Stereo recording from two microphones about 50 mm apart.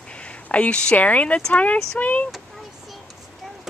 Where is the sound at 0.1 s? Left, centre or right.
Left.